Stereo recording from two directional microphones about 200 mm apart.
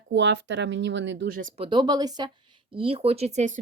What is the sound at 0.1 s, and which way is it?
Speech, 65° right (ahead or behind).